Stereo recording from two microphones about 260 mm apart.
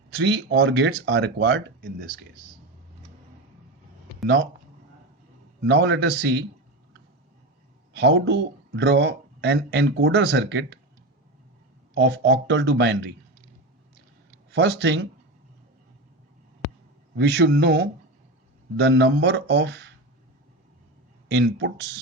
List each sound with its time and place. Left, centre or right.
0.2 s speech: right
5.6 s a man's voice: right
7.9 s speech: right
11.9 s speech: right
14.5 s speech: right
17.2 s a man's voice: right
21.2 s speech: right